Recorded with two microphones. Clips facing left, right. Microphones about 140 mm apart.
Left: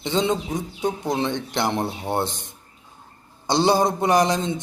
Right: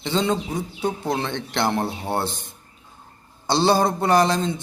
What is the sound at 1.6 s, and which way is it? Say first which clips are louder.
Speech: right 1 dB; 5° right (ahead or behind).